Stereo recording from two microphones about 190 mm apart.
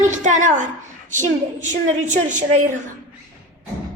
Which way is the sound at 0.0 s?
40° right (ahead or behind).